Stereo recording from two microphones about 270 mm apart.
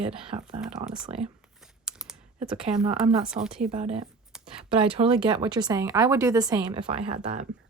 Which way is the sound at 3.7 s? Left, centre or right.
Right.